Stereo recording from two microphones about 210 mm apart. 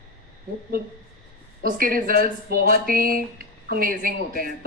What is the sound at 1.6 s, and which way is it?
A woman's voice, 45° right (ahead or behind).